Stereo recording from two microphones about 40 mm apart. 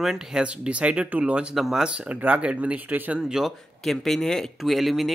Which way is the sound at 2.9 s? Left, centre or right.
Right.